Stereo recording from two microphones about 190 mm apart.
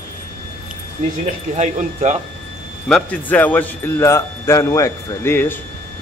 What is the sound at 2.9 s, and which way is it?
Speech, 5° left (ahead or behind).